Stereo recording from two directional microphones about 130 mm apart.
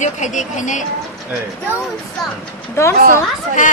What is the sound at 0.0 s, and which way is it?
Speech, 65° left (ahead or behind).